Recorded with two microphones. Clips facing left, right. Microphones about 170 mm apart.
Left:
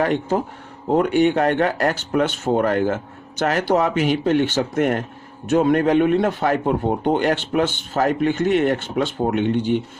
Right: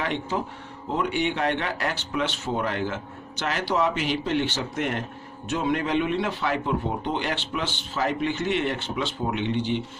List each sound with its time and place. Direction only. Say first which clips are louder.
0.0 s a man's voice: left 8 dB; 45° left (ahead or behind)